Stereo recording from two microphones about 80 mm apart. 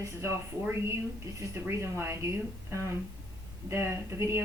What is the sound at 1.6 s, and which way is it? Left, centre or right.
A woman's voice, right.